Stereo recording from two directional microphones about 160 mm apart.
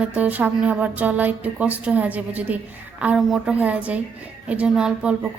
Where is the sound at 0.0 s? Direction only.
10° right (ahead or behind).